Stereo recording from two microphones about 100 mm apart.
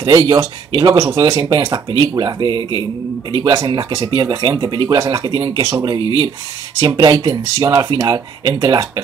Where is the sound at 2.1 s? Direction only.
40° right (ahead or behind).